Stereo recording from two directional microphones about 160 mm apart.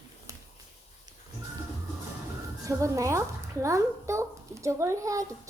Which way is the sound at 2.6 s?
20° right (ahead or behind).